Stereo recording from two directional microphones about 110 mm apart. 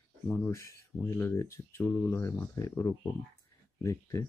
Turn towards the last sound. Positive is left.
turn(degrees=25)  # may be behind; listen again after turning